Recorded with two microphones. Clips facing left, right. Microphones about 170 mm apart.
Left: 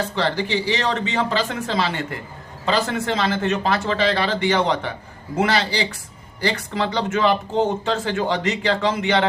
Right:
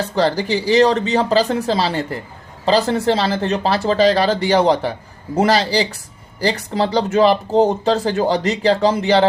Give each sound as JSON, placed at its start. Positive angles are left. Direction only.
{"t": 0.2, "sound": "speech", "side_deg": -40}